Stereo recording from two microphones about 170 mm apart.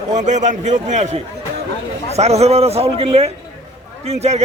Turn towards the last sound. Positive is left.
turn(degrees=-40)  # may be behind; listen again after turning